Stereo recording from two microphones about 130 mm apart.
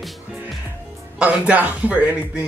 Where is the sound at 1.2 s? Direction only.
10° right (ahead or behind).